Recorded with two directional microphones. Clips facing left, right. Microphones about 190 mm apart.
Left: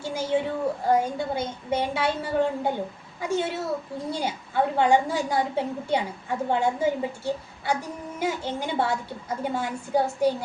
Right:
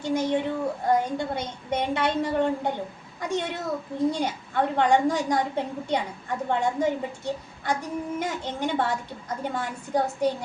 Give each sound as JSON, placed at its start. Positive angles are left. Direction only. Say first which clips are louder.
{"t": 0.0, "sound": "a woman's voice", "louder": "right 1 dB", "side_deg": 5}